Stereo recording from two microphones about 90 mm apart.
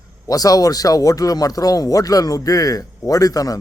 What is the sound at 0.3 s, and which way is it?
A man's voice, 45° left (ahead or behind).